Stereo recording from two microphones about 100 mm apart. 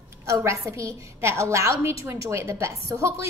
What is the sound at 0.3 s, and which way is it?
A woman's voice, 30° right (ahead or behind).